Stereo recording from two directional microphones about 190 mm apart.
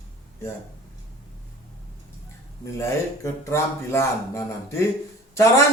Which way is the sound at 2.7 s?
15° left (ahead or behind).